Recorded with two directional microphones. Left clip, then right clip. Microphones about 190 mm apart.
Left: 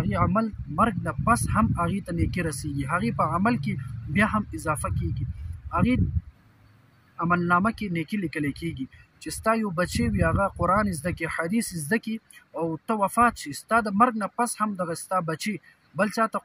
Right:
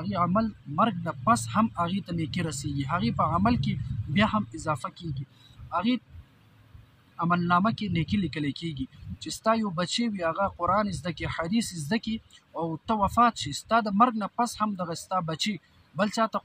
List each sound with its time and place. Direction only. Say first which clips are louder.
0.0 s a man's voice: left 1 dB; 10° left (ahead or behind)
7.2 s speech: left 2 dB; 5° left (ahead or behind)